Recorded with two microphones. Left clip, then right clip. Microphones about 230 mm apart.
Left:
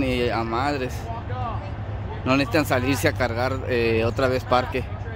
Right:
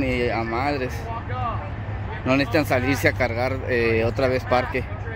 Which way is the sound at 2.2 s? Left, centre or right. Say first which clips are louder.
Even; centre.